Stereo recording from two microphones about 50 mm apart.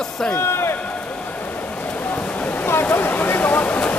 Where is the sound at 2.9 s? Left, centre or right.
Left.